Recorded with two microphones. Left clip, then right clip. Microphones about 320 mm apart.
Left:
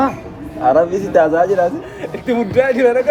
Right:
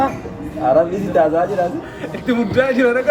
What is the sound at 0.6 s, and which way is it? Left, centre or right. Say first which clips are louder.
Speech: left 2 dB; left.